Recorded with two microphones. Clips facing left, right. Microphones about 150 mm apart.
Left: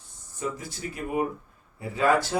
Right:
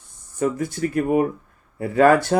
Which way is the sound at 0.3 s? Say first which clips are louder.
Right 10 dB; 55° right (ahead or behind).